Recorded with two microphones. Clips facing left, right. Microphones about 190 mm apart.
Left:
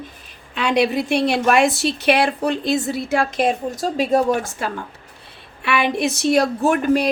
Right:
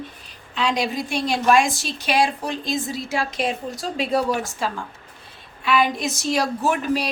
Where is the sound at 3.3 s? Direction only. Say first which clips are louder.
Left 5 dB; 45° left (ahead or behind).